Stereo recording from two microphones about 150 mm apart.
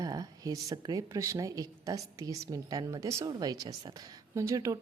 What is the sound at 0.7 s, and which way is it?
Speech, 25° right (ahead or behind).